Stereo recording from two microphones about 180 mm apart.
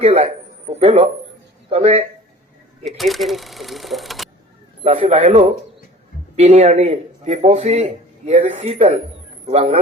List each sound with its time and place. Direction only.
0.0 s a man's voice: 35° right (ahead or behind)
2.8 s speech: centre (ahead or behind)
4.8 s speech: 35° right (ahead or behind)